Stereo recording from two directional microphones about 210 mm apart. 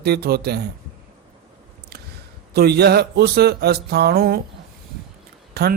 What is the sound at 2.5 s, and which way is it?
A man's voice, 50° right (ahead or behind).